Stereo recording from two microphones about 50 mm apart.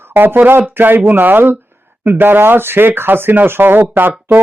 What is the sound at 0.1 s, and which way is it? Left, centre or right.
A man's voice, right.